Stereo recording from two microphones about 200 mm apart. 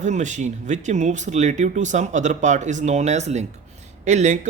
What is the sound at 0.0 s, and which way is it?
Speech, 35° right (ahead or behind).